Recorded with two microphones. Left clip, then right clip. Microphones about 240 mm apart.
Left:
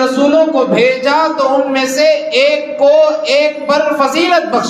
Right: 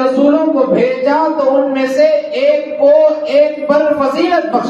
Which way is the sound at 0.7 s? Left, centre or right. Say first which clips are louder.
Left 1 dB; left.